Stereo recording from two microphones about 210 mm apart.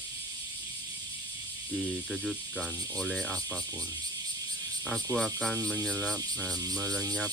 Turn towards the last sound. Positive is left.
turn(degrees=10)  # may be behind; listen again after turning